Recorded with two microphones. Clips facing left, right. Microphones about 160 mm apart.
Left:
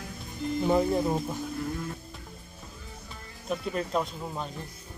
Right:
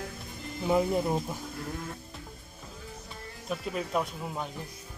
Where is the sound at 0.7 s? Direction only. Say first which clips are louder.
Right 1 dB; 5° right (ahead or behind).